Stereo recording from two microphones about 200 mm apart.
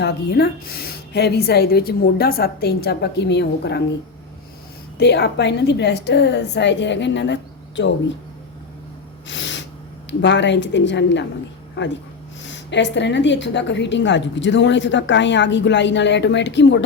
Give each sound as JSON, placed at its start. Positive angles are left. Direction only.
{"t": 0.0, "sound": "a woman's voice", "side_deg": 55}
{"t": 4.9, "sound": "a woman's voice", "side_deg": 55}
{"t": 9.2, "sound": "gasp", "side_deg": 65}
{"t": 10.1, "sound": "a woman's voice", "side_deg": 60}